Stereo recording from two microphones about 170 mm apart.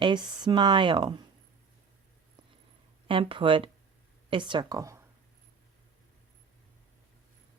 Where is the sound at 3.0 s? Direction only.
30° right (ahead or behind).